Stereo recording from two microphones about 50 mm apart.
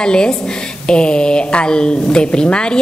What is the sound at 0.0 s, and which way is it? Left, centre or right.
A woman's voice, centre.